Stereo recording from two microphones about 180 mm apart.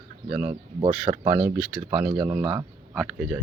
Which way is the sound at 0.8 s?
30° right (ahead or behind).